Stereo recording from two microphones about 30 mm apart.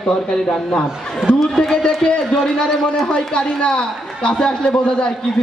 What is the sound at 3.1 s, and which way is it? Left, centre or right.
A man's voice, left.